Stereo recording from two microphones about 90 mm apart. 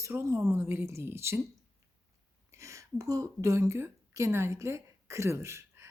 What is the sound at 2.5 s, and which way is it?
A woman's voice, 35° right (ahead or behind).